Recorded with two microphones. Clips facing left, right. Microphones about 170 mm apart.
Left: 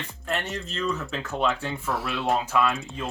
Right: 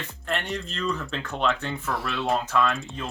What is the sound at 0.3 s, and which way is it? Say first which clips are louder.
Speech: right 1 dB; centre (ahead or behind).